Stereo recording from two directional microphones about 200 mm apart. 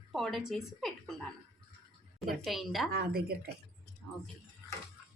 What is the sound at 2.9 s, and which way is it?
Speech, 50° right (ahead or behind).